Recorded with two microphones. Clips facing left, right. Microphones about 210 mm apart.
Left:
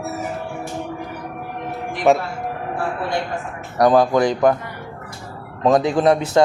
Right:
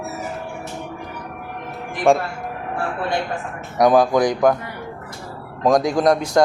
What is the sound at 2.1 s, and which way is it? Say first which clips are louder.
Speech: even; centre (ahead or behind).